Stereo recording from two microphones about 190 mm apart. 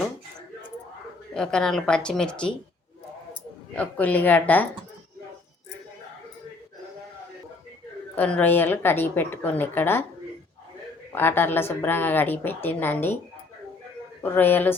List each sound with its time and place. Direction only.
1.3 s a woman's voice: 5° left (ahead or behind)
3.8 s a woman's voice: 10° left (ahead or behind)
8.1 s a woman's voice: 10° left (ahead or behind)
11.1 s a woman's voice: 10° left (ahead or behind)
14.2 s a woman's voice: 10° left (ahead or behind)